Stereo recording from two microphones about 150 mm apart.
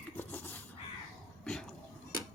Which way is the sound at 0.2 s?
10° left (ahead or behind).